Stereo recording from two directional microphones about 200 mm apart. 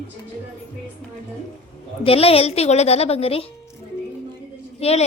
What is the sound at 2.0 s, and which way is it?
A woman's voice, 30° left (ahead or behind).